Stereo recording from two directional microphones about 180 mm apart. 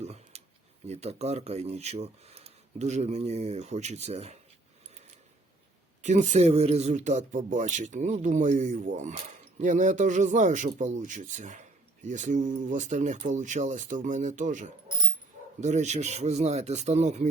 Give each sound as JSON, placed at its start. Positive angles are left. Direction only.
{"t": 0.0, "sound": "a sound", "side_deg": -35}
{"t": 0.9, "sound": "speech", "side_deg": -35}
{"t": 6.0, "sound": "a man's voice", "side_deg": -40}